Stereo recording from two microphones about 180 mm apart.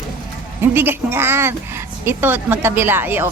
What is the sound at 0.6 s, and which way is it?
Speech, 10° right (ahead or behind).